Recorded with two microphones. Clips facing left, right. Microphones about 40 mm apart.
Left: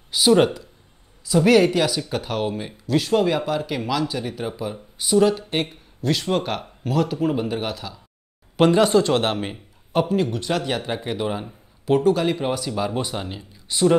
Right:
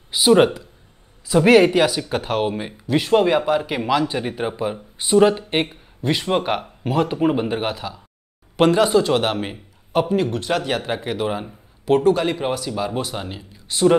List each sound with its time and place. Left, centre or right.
0.1 s a man's voice: centre